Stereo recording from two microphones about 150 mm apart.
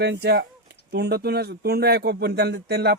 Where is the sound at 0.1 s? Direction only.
90° right.